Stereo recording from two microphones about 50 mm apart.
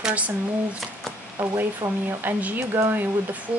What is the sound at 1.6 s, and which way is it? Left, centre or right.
Speech, right.